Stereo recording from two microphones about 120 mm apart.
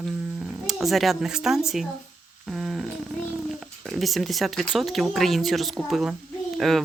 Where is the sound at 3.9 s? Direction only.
Centre (ahead or behind).